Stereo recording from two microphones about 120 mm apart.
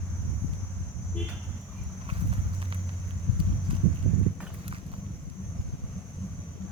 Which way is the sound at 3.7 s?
45° right (ahead or behind).